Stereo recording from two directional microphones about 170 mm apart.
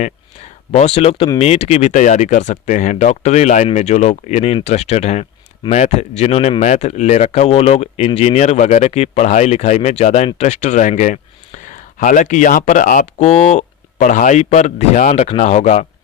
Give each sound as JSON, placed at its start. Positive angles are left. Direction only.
{"t": 0.7, "sound": "speech", "side_deg": 40}